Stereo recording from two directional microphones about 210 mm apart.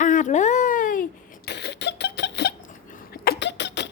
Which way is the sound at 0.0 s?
35° left (ahead or behind).